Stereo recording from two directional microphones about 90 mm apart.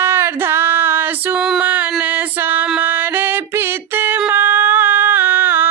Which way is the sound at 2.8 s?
25° right (ahead or behind).